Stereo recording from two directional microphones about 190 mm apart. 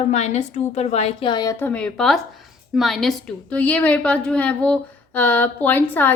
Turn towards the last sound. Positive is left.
turn(degrees=10)  # may be behind; listen again after turning